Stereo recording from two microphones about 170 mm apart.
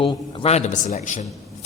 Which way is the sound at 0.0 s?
30° left (ahead or behind).